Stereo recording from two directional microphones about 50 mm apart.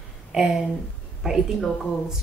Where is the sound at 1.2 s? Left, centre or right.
Centre.